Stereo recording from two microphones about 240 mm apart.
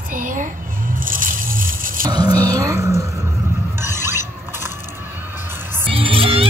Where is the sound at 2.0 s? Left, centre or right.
Centre.